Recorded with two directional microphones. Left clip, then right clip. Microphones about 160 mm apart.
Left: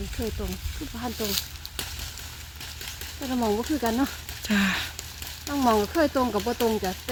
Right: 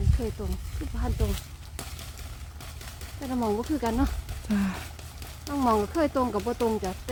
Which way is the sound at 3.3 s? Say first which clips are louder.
Left 2 dB; 55° left (ahead or behind).